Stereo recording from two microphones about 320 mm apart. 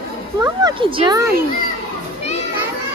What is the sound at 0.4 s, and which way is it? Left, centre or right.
Speech, centre.